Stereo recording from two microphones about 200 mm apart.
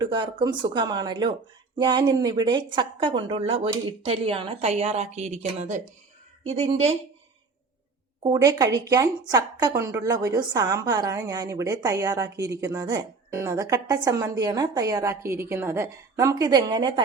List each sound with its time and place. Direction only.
0.0 s speech: 25° right (ahead or behind)
8.2 s a woman's voice: 15° right (ahead or behind)